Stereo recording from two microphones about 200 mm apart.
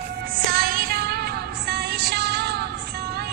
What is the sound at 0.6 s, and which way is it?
Music, 45° right (ahead or behind).